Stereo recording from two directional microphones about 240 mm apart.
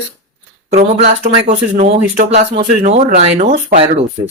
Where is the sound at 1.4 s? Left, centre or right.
Right.